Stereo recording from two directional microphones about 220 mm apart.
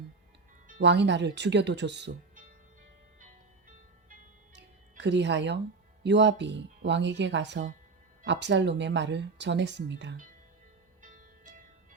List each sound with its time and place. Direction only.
0.8 s speech: 55° right (ahead or behind)
4.5 s music: 50° right (ahead or behind)
6.0 s speech: 50° right (ahead or behind)
11.0 s music: 35° right (ahead or behind)